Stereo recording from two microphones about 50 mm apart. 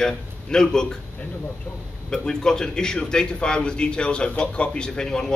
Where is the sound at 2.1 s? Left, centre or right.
Centre.